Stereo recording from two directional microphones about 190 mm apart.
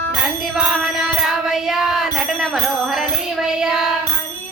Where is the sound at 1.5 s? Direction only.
5° right (ahead or behind).